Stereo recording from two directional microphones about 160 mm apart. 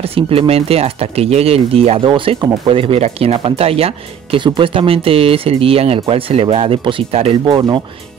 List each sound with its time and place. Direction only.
0.1 s speech: 35° right (ahead or behind)
7.4 s speech: 30° right (ahead or behind)